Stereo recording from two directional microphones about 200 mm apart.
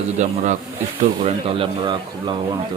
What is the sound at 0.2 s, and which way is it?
Speech, 35° right (ahead or behind).